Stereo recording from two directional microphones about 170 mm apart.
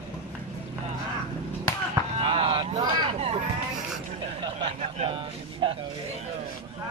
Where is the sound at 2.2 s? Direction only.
30° right (ahead or behind).